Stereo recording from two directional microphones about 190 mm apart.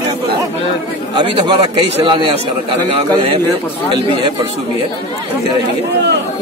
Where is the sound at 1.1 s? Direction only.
25° right (ahead or behind).